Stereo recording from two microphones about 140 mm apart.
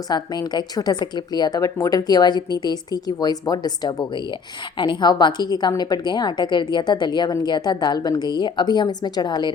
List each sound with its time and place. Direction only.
0.1 s a woman's voice: 30° left (ahead or behind)